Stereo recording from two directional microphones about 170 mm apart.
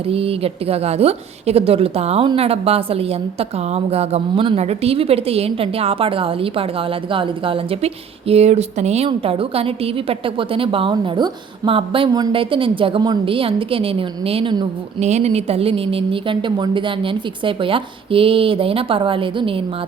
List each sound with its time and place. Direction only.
0.1 s a woman's voice: 35° right (ahead or behind)
15.0 s a woman's voice: 40° right (ahead or behind)